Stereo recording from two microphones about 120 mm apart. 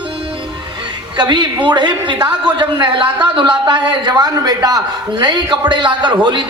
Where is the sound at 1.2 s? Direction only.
40° right (ahead or behind).